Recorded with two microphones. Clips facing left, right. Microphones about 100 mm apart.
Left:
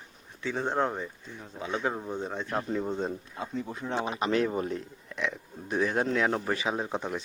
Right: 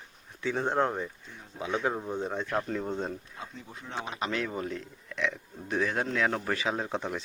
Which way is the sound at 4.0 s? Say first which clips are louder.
Left 5 dB; 25° left (ahead or behind).